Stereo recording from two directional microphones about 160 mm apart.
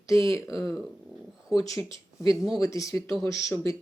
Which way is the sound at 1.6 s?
20° left (ahead or behind).